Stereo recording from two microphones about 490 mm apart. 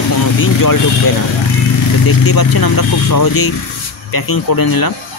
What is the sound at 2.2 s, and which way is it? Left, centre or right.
Speech, left.